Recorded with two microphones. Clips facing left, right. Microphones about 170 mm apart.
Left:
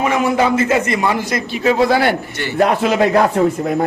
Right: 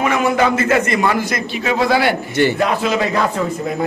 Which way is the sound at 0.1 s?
20° left (ahead or behind).